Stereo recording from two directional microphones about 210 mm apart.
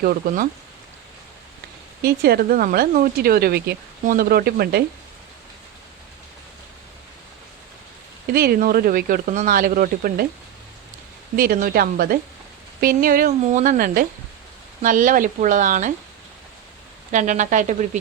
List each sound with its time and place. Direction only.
0.0 s speech: 45° right (ahead or behind)
2.0 s speech: 45° right (ahead or behind)
8.3 s speech: 45° right (ahead or behind)
11.3 s speech: 45° right (ahead or behind)
17.1 s speech: 35° right (ahead or behind)